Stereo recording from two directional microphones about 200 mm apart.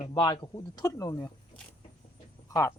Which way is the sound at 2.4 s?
15° left (ahead or behind).